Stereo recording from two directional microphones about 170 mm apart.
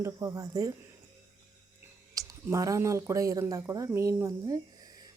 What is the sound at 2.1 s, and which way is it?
Speech, 20° right (ahead or behind).